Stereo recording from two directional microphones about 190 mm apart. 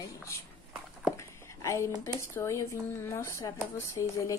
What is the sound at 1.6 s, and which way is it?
Speech, 15° left (ahead or behind).